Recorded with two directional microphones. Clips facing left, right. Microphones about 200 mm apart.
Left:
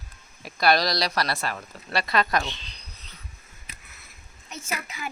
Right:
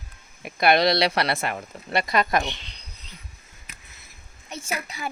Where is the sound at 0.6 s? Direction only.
25° right (ahead or behind).